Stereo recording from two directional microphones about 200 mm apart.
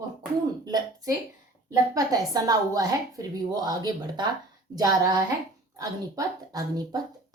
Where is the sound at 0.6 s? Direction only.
20° right (ahead or behind).